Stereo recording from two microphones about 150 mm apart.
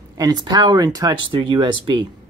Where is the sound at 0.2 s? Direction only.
30° right (ahead or behind).